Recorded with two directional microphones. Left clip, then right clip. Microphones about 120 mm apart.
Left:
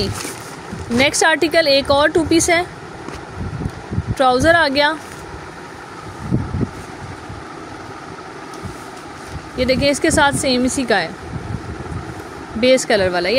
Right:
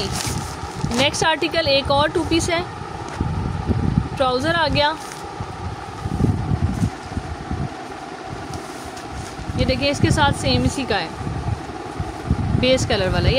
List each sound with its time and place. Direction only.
0.9 s speech: 45° left (ahead or behind)
4.2 s speech: 50° left (ahead or behind)
9.6 s speech: 45° left (ahead or behind)
12.5 s speech: 40° left (ahead or behind)